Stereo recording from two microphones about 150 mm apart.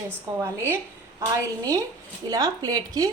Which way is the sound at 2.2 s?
25° right (ahead or behind).